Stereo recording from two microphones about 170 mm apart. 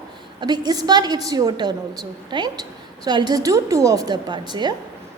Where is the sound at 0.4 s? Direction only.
25° right (ahead or behind).